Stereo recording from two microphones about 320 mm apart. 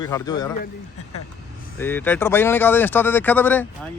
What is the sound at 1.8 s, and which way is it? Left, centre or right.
Speech, centre.